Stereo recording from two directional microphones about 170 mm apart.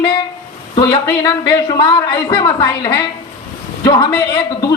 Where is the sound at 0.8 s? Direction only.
25° left (ahead or behind).